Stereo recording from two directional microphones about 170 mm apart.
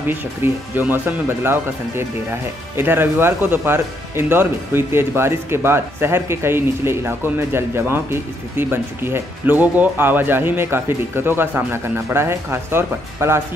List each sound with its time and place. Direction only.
0.1 s speech: 10° right (ahead or behind)